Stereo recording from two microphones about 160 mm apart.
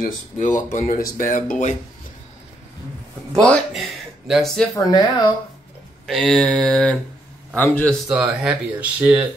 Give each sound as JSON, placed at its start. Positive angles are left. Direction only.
{"t": 0.0, "sound": "speech", "side_deg": 50}
{"t": 3.3, "sound": "speech", "side_deg": 5}
{"t": 4.7, "sound": "speech", "side_deg": 25}
{"t": 6.0, "sound": "a man's voice", "side_deg": 5}
{"t": 8.1, "sound": "speech", "side_deg": -5}